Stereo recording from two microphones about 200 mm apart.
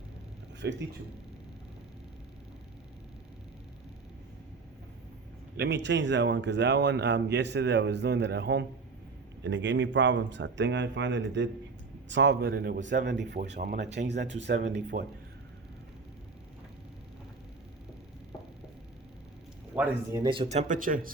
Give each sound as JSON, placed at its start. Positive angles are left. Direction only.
{"t": 0.6, "sound": "speech", "side_deg": -60}
{"t": 5.5, "sound": "speech", "side_deg": -60}
{"t": 19.7, "sound": "speech", "side_deg": -5}
{"t": 20.1, "sound": "speech", "side_deg": -25}